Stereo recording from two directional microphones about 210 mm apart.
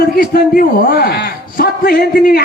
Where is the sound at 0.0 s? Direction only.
45° left (ahead or behind).